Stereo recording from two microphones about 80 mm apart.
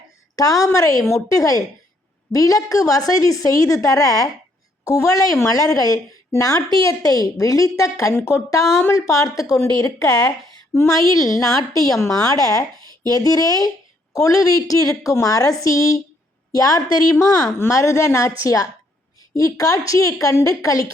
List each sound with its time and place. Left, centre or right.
0.3 s a woman's voice: left
10.0 s a woman's voice: left
10.8 s a woman's voice: left
17.2 s a woman's voice: left